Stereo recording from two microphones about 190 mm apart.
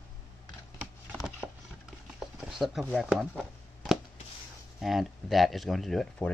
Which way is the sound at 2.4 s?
5° right (ahead or behind).